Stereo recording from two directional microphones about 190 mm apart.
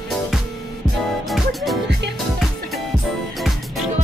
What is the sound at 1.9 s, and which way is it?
Music, 65° right (ahead or behind).